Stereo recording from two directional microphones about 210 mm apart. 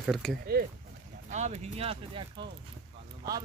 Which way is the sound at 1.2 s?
35° right (ahead or behind).